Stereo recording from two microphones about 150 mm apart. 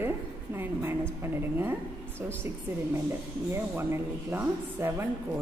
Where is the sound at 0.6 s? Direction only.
15° right (ahead or behind).